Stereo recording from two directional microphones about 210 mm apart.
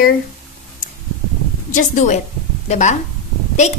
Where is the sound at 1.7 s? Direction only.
35° left (ahead or behind).